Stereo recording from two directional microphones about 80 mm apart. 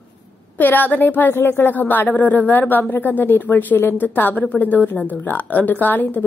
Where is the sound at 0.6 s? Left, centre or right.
Left.